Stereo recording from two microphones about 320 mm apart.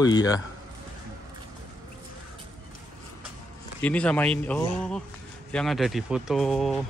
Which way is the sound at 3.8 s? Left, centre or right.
Centre.